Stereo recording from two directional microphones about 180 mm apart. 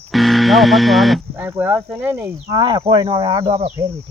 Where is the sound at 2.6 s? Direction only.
30° right (ahead or behind).